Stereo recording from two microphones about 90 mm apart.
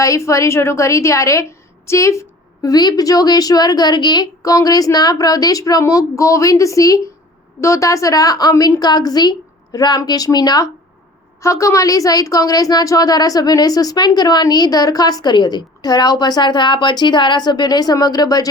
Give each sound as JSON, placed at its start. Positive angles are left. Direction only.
{"t": 0.0, "sound": "a woman's voice", "side_deg": 35}
{"t": 11.3, "sound": "a woman's voice", "side_deg": 35}